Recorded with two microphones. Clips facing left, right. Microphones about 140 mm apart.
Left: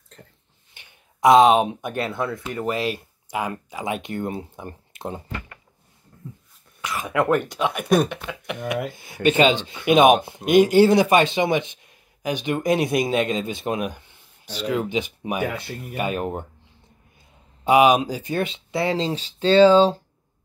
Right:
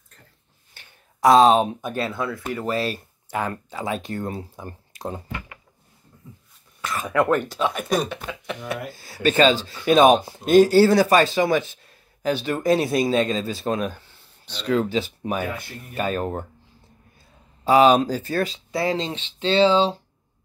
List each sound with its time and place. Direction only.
0.7 s speech: 20° left (ahead or behind)
6.8 s speech: 15° left (ahead or behind)
8.2 s speech: 40° right (ahead or behind)
8.6 s speech: 20° left (ahead or behind)
15.4 s speech: 65° left (ahead or behind)
15.9 s speech: 15° left (ahead or behind)
17.6 s speech: 15° left (ahead or behind); by 19.9 s 45° left (ahead or behind)